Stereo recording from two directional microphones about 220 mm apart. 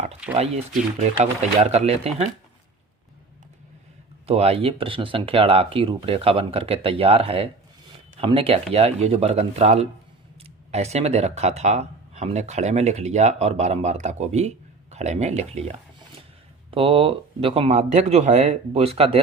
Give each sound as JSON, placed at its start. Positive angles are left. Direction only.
{"t": 0.3, "sound": "speech", "side_deg": -30}
{"t": 4.3, "sound": "speech", "side_deg": -30}
{"t": 16.7, "sound": "speech", "side_deg": -25}